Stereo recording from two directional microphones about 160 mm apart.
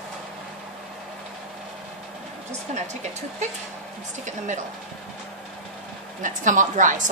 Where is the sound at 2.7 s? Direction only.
45° right (ahead or behind).